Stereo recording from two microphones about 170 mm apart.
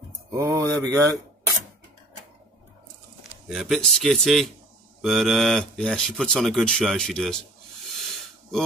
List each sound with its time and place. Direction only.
0.3 s speech: 20° right (ahead or behind)
3.4 s speech: centre (ahead or behind)
7.9 s snake: centre (ahead or behind)